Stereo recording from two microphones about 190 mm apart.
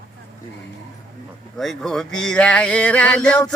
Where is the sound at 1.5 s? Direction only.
Centre (ahead or behind).